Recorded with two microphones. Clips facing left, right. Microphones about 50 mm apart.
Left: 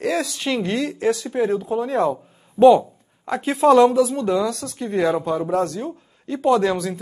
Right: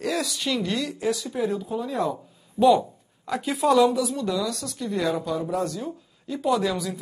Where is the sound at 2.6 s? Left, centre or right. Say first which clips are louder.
Left 6 dB; left.